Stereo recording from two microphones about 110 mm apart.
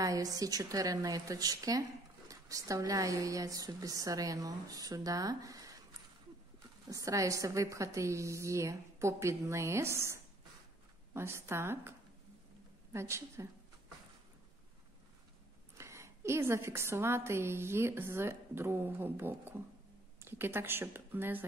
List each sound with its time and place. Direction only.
0.0 s a woman's voice: 35° right (ahead or behind)
6.9 s a woman's voice: 30° right (ahead or behind)
12.9 s a woman's voice: 25° right (ahead or behind)
15.8 s a woman's voice: 25° right (ahead or behind)